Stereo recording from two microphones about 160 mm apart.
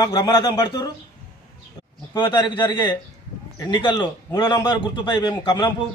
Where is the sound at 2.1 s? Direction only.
30° left (ahead or behind).